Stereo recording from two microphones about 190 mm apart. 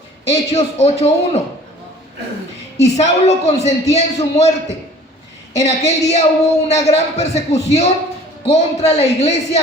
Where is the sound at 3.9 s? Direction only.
35° left (ahead or behind).